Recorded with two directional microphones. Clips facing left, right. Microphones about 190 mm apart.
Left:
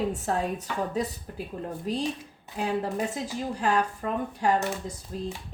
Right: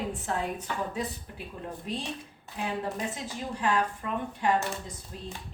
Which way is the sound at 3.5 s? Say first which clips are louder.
Left 1 dB; 35° left (ahead or behind).